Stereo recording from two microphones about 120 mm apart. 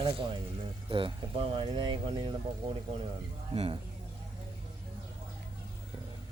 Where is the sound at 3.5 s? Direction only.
50° right (ahead or behind).